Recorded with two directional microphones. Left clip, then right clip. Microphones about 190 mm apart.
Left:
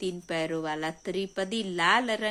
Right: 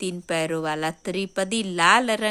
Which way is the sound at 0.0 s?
40° right (ahead or behind).